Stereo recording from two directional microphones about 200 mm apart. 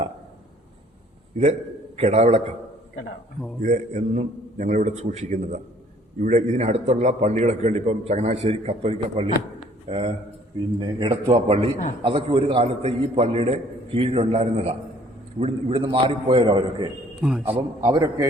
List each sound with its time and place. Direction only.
2.0 s a man's voice: 35° right (ahead or behind)
3.6 s a man's voice: 40° right (ahead or behind); by 16.9 s 20° right (ahead or behind)
17.2 s a man's voice: 5° right (ahead or behind)